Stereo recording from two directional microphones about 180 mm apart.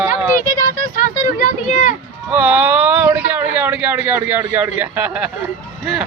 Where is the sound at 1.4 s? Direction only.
45° left (ahead or behind).